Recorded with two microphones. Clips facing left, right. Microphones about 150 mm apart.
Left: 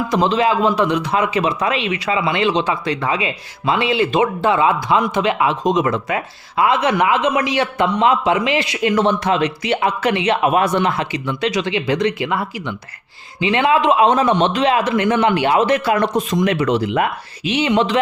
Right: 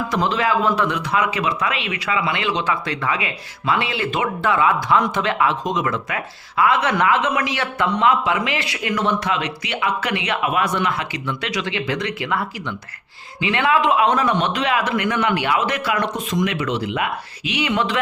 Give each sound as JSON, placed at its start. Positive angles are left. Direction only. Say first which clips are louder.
{"t": 0.1, "sound": "speech", "louder": "left 4 dB", "side_deg": 20}
{"t": 17.5, "sound": "speech", "louder": "left 5 dB", "side_deg": 25}